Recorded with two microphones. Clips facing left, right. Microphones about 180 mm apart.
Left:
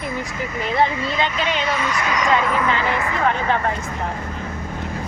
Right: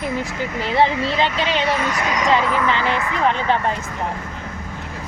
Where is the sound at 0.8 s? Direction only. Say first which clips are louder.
Right 3 dB; 30° right (ahead or behind).